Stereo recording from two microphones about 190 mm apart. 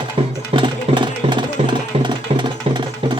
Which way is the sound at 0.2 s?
30° right (ahead or behind).